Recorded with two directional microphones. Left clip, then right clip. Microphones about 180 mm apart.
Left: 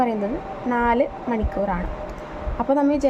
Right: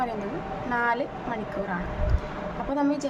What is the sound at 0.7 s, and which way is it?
Speech, 30° left (ahead or behind).